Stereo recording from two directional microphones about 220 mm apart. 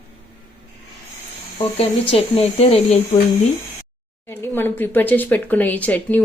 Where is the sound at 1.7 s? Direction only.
25° left (ahead or behind).